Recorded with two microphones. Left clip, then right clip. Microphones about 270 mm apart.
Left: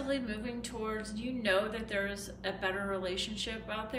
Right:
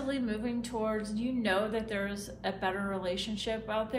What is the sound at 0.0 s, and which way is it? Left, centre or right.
A woman's voice, centre.